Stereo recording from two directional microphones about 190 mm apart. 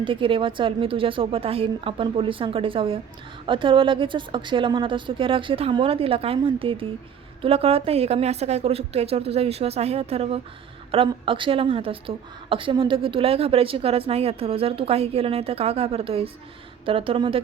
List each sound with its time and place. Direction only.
0.0 s a woman's voice: 25° right (ahead or behind)